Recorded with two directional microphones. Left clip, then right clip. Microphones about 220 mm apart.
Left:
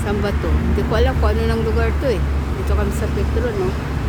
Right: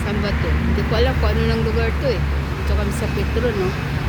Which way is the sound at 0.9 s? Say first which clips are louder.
Left 1 dB; 5° left (ahead or behind).